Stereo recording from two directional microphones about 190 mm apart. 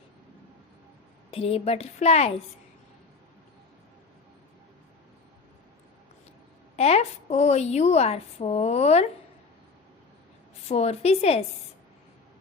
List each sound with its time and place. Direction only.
1.3 s a woman's voice: 30° left (ahead or behind)
6.7 s a woman's voice: 35° left (ahead or behind)
10.7 s a woman's voice: 35° left (ahead or behind)